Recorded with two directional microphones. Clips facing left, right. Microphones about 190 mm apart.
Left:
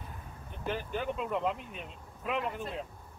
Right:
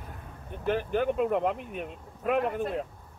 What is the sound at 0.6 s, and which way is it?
Speech, 50° right (ahead or behind).